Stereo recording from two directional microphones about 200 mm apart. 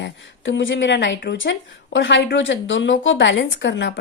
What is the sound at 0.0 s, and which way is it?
A woman's voice, 65° left (ahead or behind).